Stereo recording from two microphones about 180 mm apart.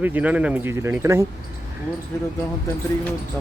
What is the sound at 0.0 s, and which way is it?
Speech, 10° right (ahead or behind).